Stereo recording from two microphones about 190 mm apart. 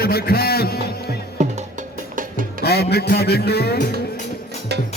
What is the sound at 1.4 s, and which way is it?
Music, 35° right (ahead or behind).